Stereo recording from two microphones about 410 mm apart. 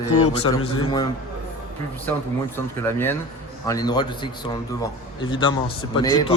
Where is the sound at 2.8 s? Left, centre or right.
Centre.